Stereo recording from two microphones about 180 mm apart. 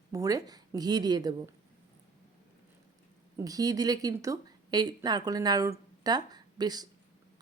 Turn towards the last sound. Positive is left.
turn(degrees=-20)  # may be behind; listen again after turning